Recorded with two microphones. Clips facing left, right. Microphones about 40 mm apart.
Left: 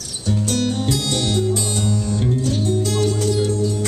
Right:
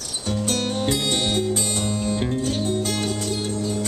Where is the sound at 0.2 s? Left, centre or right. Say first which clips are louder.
Left 3 dB; right.